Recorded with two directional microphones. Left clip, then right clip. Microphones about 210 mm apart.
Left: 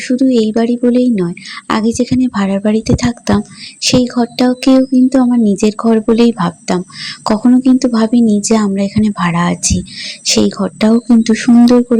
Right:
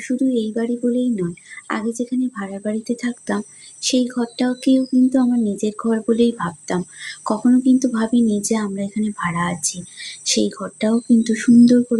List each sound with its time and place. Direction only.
0.0 s a woman's voice: 35° left (ahead or behind)